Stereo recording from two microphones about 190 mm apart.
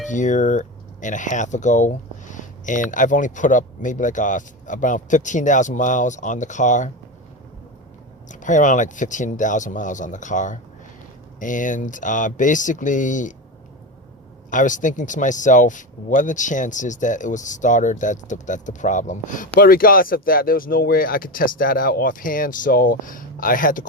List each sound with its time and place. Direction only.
0.1 s speech: 40° left (ahead or behind)
8.3 s speech: 40° left (ahead or behind)
14.5 s speech: 40° left (ahead or behind)